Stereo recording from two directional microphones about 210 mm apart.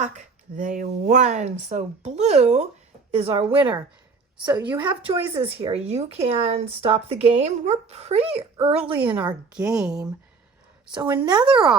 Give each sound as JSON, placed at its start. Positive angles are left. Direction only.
{"t": 0.0, "sound": "speech", "side_deg": -35}
{"t": 3.6, "sound": "a woman's voice", "side_deg": -10}
{"t": 5.3, "sound": "speech", "side_deg": -25}
{"t": 8.8, "sound": "a woman's voice", "side_deg": -5}
{"t": 11.1, "sound": "speech", "side_deg": -20}